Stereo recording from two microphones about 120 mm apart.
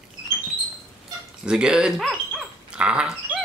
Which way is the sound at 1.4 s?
5° right (ahead or behind).